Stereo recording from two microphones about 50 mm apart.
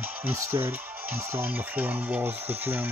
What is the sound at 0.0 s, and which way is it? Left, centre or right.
Music, right.